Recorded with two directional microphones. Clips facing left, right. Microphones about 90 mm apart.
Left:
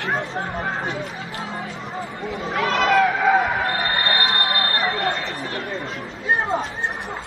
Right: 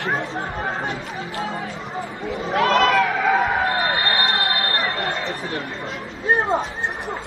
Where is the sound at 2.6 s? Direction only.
45° right (ahead or behind).